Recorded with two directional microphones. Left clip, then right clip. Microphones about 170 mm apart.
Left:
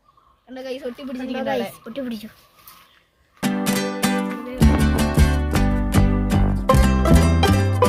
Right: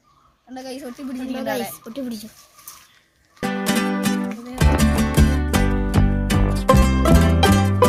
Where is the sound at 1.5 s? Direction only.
15° right (ahead or behind).